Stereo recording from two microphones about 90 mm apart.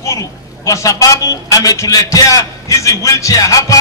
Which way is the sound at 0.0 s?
35° left (ahead or behind).